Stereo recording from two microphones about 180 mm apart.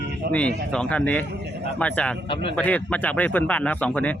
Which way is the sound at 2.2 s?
30° left (ahead or behind).